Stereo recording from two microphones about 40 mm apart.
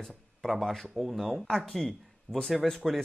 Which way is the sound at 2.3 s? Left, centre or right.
Right.